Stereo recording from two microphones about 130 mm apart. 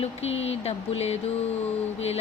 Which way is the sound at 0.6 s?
50° left (ahead or behind).